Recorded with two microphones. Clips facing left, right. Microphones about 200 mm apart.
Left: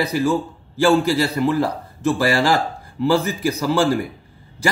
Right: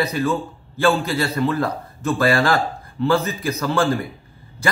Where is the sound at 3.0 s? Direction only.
10° left (ahead or behind).